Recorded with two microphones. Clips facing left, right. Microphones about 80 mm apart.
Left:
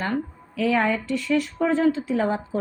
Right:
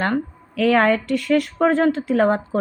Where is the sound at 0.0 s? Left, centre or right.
Right.